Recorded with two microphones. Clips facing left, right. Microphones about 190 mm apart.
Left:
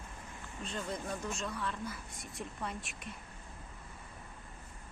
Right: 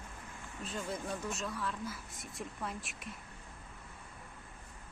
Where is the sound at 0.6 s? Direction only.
5° right (ahead or behind).